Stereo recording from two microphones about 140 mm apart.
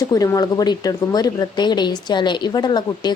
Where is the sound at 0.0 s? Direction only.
25° left (ahead or behind).